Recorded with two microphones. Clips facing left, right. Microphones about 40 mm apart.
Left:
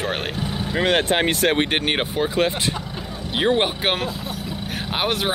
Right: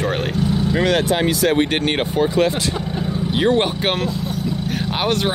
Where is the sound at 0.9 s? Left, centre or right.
Left.